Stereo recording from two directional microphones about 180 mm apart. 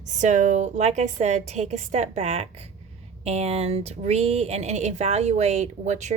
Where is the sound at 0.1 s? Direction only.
40° right (ahead or behind).